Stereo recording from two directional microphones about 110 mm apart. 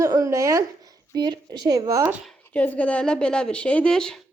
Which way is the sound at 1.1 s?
40° right (ahead or behind).